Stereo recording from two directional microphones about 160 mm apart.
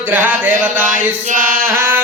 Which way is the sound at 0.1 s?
10° right (ahead or behind).